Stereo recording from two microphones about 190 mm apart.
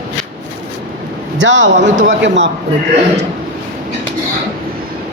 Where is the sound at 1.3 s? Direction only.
75° right (ahead or behind).